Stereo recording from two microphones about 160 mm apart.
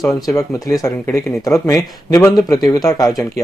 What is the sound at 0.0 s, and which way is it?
Speech, 20° left (ahead or behind).